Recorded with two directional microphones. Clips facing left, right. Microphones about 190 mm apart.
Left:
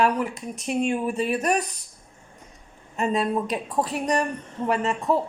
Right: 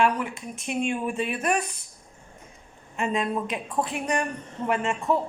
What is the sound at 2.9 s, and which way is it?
Speech, 40° left (ahead or behind).